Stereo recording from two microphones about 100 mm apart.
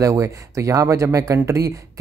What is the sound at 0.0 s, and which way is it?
Speech, 35° right (ahead or behind).